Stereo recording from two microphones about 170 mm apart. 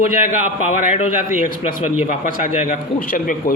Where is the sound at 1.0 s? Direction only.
40° left (ahead or behind).